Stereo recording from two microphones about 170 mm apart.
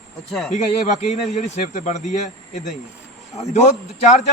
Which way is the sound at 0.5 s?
45° left (ahead or behind).